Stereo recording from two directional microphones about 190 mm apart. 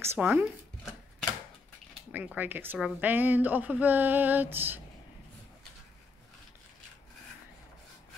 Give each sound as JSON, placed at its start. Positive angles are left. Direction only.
{"t": 0.0, "sound": "speech", "side_deg": -10}
{"t": 2.1, "sound": "a woman's voice", "side_deg": -10}